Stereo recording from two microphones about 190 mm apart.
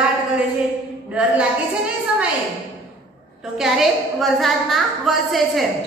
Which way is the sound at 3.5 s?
Centre (ahead or behind).